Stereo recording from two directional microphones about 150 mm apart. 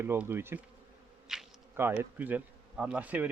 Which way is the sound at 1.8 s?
15° right (ahead or behind).